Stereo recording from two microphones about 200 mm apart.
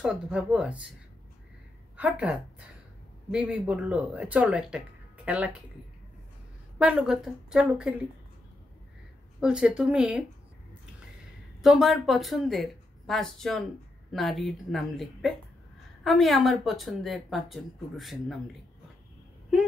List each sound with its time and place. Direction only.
0.0 s speech: 5° right (ahead or behind)
2.0 s a woman's voice: 5° right (ahead or behind)
6.8 s speech: 5° right (ahead or behind)
9.4 s speech: 5° right (ahead or behind)
11.6 s speech: centre (ahead or behind)